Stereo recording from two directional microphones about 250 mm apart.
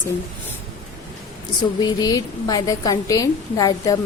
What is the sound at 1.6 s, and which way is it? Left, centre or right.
A woman's voice, centre.